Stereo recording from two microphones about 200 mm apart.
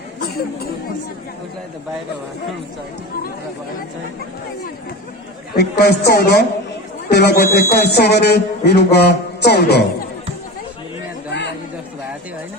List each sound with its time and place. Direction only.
0.2 s chatter: 50° left (ahead or behind)
5.5 s a man's voice: 55° left (ahead or behind)
11.3 s chatter: 60° left (ahead or behind)